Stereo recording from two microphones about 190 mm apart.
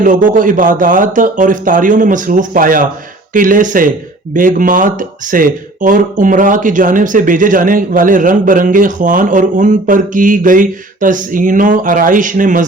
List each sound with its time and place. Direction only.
0.0 s speech: 45° right (ahead or behind)